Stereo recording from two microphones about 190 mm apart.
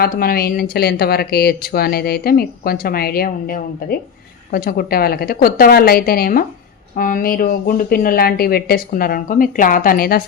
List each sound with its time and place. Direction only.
0.0 s speech: 50° left (ahead or behind)